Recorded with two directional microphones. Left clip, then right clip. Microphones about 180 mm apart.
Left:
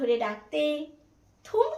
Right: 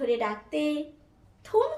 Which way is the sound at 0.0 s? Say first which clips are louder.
Left 1 dB; 10° right (ahead or behind).